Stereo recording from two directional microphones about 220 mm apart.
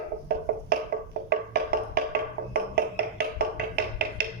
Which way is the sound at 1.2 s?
45° right (ahead or behind).